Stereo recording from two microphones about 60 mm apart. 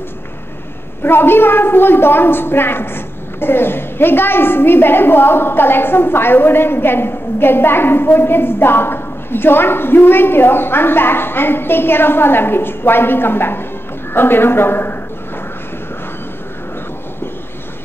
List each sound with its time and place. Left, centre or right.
1.0 s a woman's voice: left